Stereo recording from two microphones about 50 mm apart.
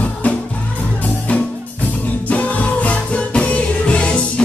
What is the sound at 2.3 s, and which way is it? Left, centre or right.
Music, left.